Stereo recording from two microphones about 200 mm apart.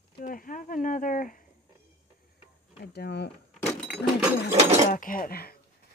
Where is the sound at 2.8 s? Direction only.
55° left (ahead or behind).